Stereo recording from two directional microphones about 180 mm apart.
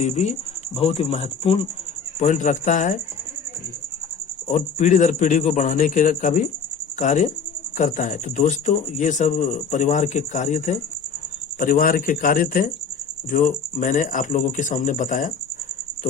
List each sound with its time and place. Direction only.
0.0 s speech: 40° left (ahead or behind)
4.4 s speech: 45° left (ahead or behind)